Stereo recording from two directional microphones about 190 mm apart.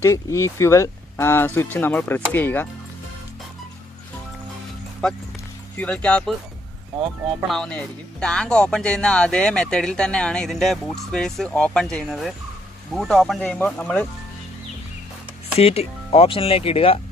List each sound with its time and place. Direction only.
0.0 s speech: 15° left (ahead or behind)
5.8 s speech: 5° left (ahead or behind)
7.4 s speech: 5° left (ahead or behind)
15.6 s speech: 35° left (ahead or behind)